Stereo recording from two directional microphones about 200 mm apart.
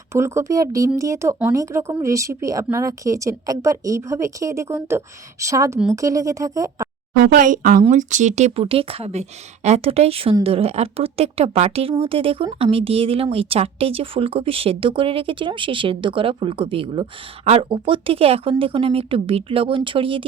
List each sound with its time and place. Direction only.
0.1 s a woman's voice: 15° right (ahead or behind)
7.2 s a woman's voice: 45° right (ahead or behind); by 20.2 s 25° right (ahead or behind)